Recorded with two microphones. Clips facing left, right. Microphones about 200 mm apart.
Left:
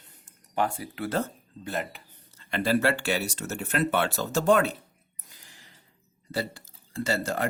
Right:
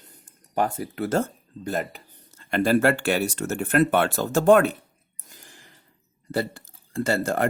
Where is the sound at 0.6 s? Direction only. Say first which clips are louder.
Right 3 dB; 45° right (ahead or behind).